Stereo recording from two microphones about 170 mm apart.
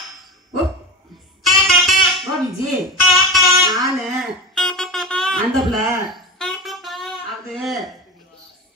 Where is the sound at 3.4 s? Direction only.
20° right (ahead or behind).